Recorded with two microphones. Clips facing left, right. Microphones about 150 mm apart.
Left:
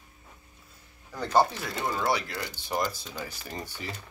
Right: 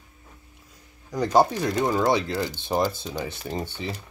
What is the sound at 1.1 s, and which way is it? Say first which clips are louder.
Speech: right 5 dB; 15° right (ahead or behind).